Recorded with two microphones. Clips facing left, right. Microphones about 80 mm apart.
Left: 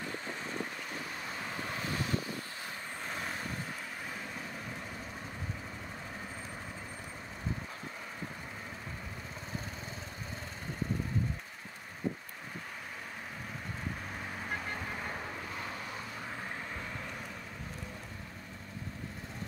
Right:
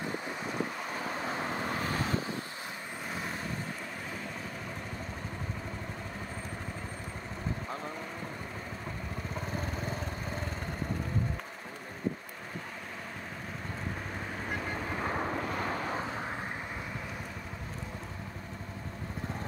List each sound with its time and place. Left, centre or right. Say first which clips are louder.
1.2 s vehicle: right 6 dB; right
3.1 s vehicle: right 2 dB; centre
15.0 s vehicle: right 8 dB; right
16.0 s vehicle: right 6 dB; right